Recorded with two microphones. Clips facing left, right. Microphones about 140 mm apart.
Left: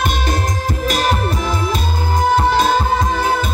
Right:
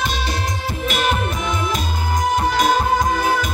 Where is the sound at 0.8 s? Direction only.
40° left (ahead or behind).